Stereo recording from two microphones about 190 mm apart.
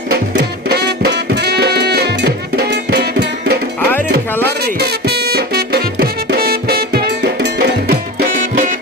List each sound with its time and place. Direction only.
0.1 s music: 60° right (ahead or behind)
3.8 s music: 10° left (ahead or behind)
4.4 s music: 55° right (ahead or behind)